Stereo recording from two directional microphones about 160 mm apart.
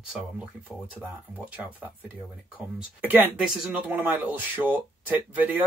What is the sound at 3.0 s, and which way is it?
Speech, 10° right (ahead or behind).